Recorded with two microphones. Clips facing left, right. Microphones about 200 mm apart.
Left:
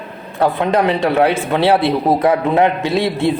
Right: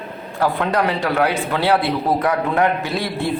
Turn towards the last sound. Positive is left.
turn(degrees=25)  # may be behind; listen again after turning